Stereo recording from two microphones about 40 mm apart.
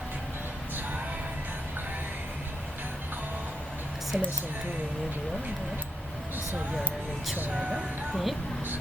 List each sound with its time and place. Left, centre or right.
4.1 s speech: right
7.5 s speech: right